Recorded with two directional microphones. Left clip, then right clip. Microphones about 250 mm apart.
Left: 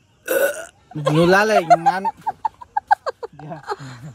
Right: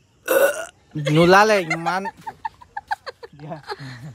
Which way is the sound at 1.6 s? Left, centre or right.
Centre.